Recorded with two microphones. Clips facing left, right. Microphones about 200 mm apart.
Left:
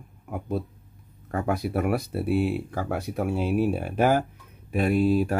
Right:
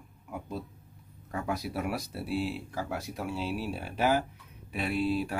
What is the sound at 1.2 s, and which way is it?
Speech, 55° left (ahead or behind).